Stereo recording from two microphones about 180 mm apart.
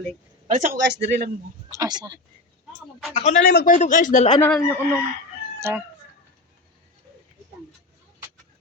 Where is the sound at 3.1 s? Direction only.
35° left (ahead or behind).